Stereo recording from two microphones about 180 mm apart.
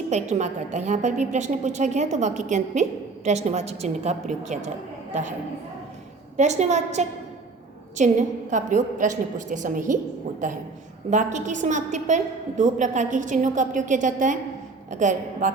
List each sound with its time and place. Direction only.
0.1 s a woman's voice: 40° right (ahead or behind)
6.3 s a woman's voice: 40° right (ahead or behind)